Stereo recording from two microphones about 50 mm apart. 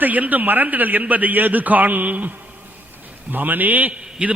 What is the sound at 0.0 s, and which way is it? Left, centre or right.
A man's voice, right.